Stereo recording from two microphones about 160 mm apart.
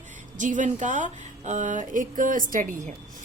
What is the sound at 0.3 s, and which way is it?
A woman's voice, 55° right (ahead or behind).